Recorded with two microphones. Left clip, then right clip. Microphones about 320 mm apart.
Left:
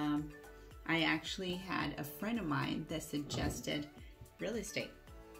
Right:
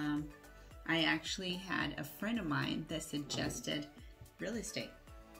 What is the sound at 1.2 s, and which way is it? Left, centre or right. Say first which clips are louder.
Speech: right 1 dB; left.